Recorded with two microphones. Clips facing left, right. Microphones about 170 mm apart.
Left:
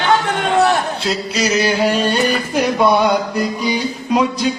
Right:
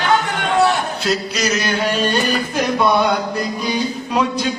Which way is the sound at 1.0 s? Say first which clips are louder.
Left 1 dB; 30° left (ahead or behind).